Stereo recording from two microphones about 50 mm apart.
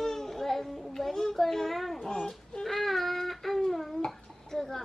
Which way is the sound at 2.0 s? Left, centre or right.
Centre.